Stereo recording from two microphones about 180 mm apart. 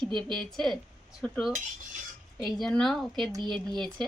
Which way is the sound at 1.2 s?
5° left (ahead or behind).